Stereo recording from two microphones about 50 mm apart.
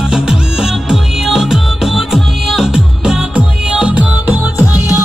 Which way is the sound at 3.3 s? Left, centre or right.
Right.